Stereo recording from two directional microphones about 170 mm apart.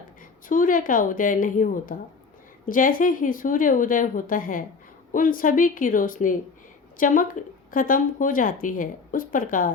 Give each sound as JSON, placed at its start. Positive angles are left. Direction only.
{"t": 0.4, "sound": "speech", "side_deg": 50}